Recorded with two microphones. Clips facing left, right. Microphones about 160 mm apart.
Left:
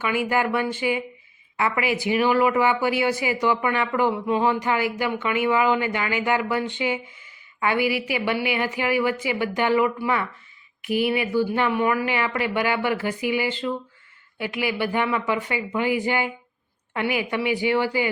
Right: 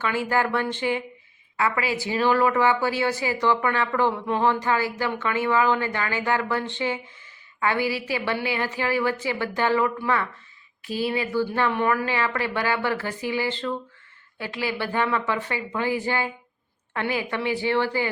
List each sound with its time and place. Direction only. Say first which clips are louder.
0.0 s speech: left 1 dB; 15° left (ahead or behind)